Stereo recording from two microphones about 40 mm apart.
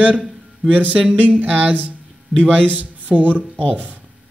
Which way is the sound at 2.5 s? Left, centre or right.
Right.